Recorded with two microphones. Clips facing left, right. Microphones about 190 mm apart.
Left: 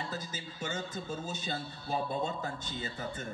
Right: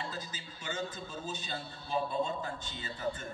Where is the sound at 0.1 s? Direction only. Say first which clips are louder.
Left 3 dB; 50° left (ahead or behind).